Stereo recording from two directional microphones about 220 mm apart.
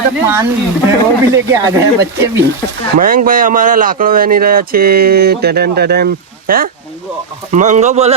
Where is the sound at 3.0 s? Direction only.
40° right (ahead or behind).